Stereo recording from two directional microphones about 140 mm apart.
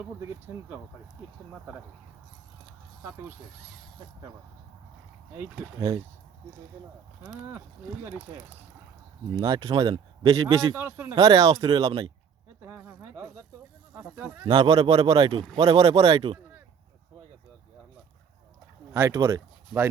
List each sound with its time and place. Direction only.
0.0 s speech: 15° right (ahead or behind)
9.3 s a man's voice: 30° right (ahead or behind)
13.9 s speech: 5° right (ahead or behind)
14.4 s a man's voice: 35° right (ahead or behind)
18.9 s speech: 20° right (ahead or behind)